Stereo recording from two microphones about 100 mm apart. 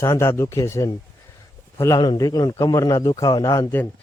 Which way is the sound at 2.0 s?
45° left (ahead or behind).